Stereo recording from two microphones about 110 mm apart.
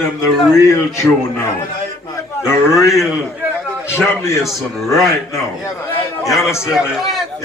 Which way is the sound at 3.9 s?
25° left (ahead or behind).